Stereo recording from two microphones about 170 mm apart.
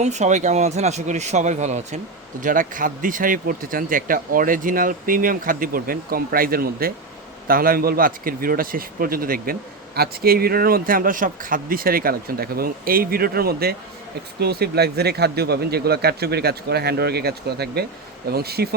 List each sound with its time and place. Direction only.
0.0 s a man's voice: 45° right (ahead or behind); by 18.7 s 70° right (ahead or behind)